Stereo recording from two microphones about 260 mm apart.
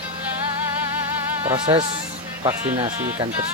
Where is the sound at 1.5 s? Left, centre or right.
Centre.